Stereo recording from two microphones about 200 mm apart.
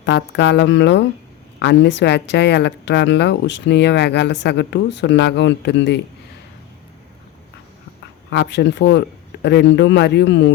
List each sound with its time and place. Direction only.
0.0 s speech: 60° left (ahead or behind)
8.3 s speech: 60° left (ahead or behind)